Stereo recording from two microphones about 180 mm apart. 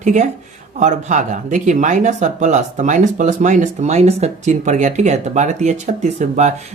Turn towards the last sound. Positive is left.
turn(degrees=-40)  # may be behind; listen again after turning